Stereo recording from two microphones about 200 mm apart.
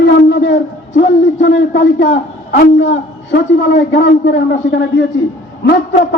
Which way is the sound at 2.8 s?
65° left (ahead or behind).